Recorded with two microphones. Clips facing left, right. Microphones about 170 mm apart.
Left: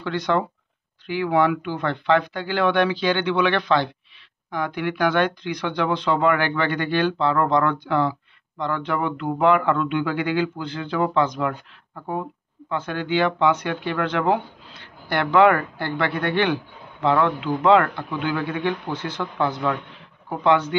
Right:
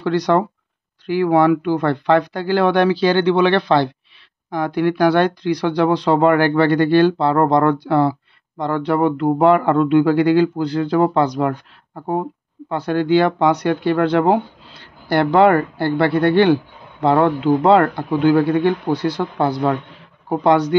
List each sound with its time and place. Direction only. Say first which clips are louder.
0.0 s speech: right 6 dB; 40° right (ahead or behind)